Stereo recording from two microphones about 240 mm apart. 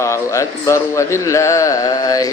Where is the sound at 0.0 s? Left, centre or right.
Centre.